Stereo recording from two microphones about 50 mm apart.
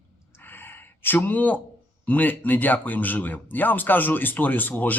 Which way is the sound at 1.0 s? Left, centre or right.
Left.